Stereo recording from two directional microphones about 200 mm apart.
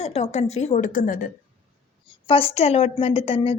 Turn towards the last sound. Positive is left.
turn(degrees=30)  # may be behind; listen again after turning